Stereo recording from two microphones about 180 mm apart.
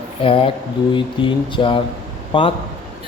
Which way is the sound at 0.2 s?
30° left (ahead or behind).